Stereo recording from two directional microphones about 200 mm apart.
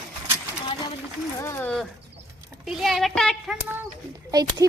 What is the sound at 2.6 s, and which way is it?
Speech, centre (ahead or behind).